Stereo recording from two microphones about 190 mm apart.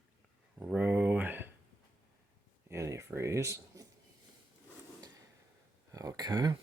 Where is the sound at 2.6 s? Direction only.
15° right (ahead or behind).